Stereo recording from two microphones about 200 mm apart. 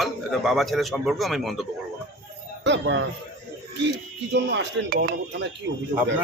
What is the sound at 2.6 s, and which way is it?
Speech, 65° right (ahead or behind).